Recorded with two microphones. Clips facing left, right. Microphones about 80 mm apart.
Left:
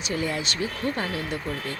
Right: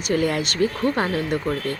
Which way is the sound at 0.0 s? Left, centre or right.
Right.